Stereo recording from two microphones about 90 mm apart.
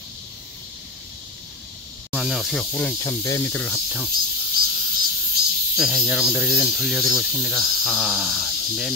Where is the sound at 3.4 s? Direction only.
20° left (ahead or behind).